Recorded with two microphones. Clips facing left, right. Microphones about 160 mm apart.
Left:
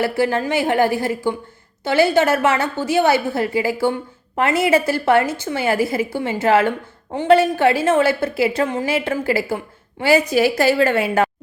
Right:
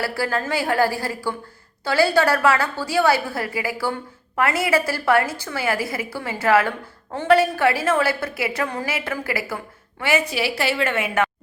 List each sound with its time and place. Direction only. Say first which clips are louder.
0.0 s a woman's voice: left 5 dB; 20° left (ahead or behind)